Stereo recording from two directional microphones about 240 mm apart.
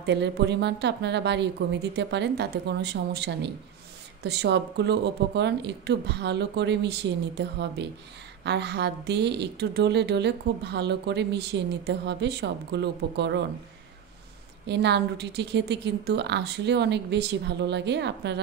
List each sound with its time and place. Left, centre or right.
0.0 s a woman's voice: right
14.7 s a woman's voice: right